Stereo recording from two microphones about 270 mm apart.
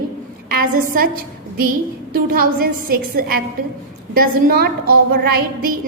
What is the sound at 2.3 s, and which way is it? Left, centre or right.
A woman's voice, right.